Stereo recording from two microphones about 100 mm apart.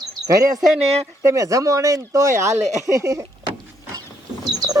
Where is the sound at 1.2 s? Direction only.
30° right (ahead or behind).